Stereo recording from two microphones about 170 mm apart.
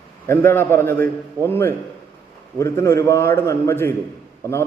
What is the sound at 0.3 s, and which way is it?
A man's voice, 15° left (ahead or behind).